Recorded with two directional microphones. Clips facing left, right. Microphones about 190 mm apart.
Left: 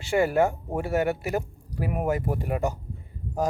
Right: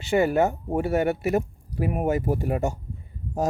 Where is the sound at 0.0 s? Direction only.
20° right (ahead or behind).